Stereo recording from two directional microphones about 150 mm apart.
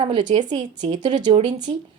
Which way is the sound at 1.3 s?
40° right (ahead or behind).